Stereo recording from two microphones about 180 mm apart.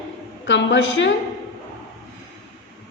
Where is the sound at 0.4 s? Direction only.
90° left.